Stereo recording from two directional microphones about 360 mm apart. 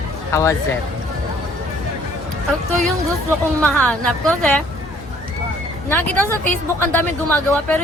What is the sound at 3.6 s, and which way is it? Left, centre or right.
A woman's voice, centre.